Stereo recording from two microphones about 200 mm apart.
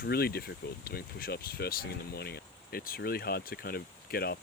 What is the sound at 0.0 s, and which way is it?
Speech, 50° left (ahead or behind).